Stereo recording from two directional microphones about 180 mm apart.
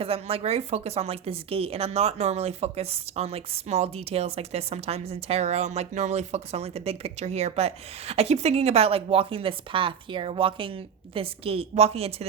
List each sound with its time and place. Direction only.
0.0 s a woman's voice: 30° right (ahead or behind)